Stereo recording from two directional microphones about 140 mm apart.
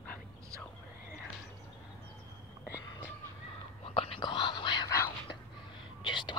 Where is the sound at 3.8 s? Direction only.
40° left (ahead or behind).